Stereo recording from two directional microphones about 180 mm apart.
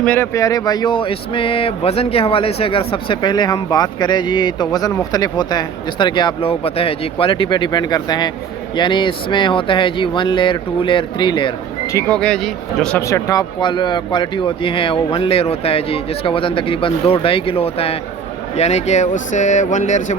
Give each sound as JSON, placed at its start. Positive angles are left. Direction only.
{"t": 0.0, "sound": "speech", "side_deg": 10}
{"t": 11.9, "sound": "a man's voice", "side_deg": 5}
{"t": 13.0, "sound": "speech", "side_deg": 15}